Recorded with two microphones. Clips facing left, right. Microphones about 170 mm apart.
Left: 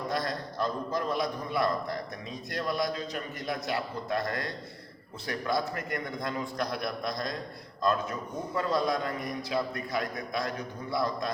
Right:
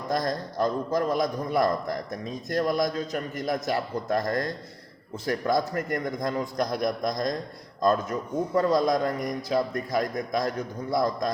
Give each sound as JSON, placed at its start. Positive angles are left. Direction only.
{"t": 0.1, "sound": "a man's voice", "side_deg": -40}
{"t": 8.5, "sound": "a man's voice", "side_deg": -40}